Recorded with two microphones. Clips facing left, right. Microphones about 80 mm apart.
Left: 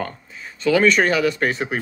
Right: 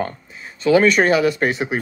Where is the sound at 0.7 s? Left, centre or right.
Centre.